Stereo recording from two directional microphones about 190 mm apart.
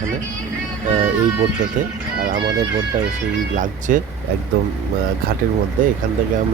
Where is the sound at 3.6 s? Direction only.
45° right (ahead or behind).